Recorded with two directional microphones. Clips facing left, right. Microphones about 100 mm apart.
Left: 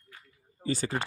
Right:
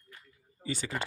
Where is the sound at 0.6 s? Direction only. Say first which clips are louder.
Left 5 dB; 45° left (ahead or behind).